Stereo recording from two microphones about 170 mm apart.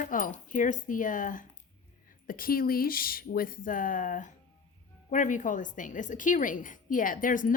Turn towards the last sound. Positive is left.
turn(degrees=50)  # may be behind; listen again after turning